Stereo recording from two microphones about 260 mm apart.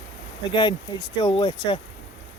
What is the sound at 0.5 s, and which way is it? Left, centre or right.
Speech, centre.